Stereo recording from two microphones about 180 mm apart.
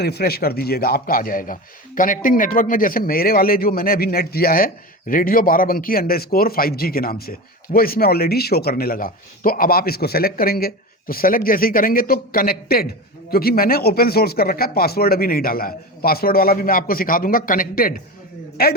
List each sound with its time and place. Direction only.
0.0 s a man's voice: 60° left (ahead or behind)